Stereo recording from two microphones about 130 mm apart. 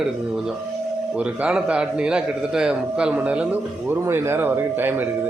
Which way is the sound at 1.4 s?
5° right (ahead or behind).